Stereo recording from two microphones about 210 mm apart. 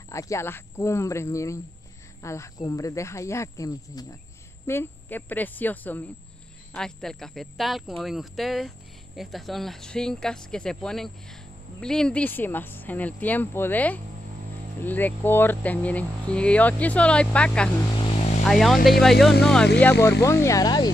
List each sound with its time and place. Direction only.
0.1 s speech: 15° left (ahead or behind)
17.9 s vehicle: 30° left (ahead or behind)
18.5 s speech: centre (ahead or behind); by 20.9 s 20° left (ahead or behind)